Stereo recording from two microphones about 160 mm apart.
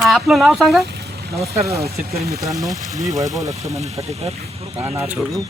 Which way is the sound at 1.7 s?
75° right (ahead or behind).